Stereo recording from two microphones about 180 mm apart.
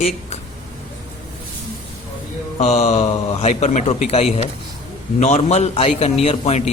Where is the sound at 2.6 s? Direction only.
40° left (ahead or behind).